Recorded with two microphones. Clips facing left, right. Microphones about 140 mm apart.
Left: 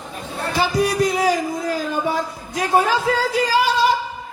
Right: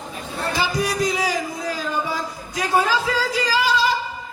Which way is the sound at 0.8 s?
55° left (ahead or behind).